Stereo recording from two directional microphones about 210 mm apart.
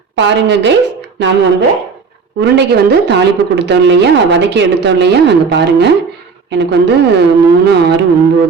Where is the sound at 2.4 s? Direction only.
50° right (ahead or behind).